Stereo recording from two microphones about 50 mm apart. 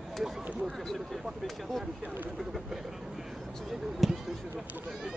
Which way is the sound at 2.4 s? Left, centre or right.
Centre.